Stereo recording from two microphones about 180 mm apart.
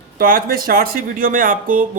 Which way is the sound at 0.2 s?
55° right (ahead or behind).